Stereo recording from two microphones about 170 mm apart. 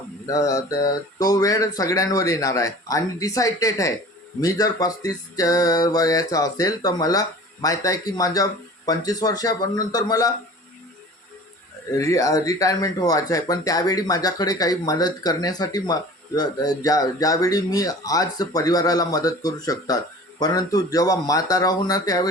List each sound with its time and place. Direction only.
0.3 s speech: 20° left (ahead or behind)
11.9 s speech: 20° left (ahead or behind)